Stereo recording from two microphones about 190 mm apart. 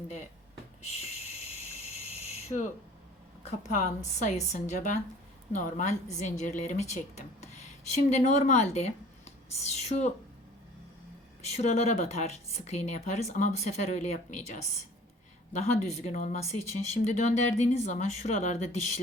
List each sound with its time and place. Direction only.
2.0 s a sound: 35° left (ahead or behind)
4.2 s speech: 35° left (ahead or behind)
11.4 s speech: 35° left (ahead or behind)